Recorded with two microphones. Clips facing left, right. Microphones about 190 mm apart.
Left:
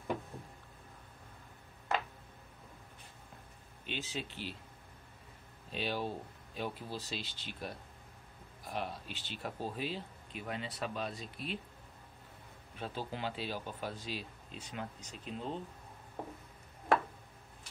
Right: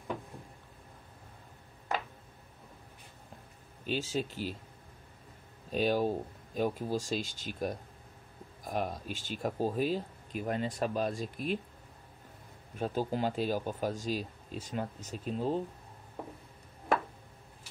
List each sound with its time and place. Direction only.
3.8 s speech: 40° right (ahead or behind)
5.7 s speech: 45° right (ahead or behind)
12.7 s speech: 45° right (ahead or behind)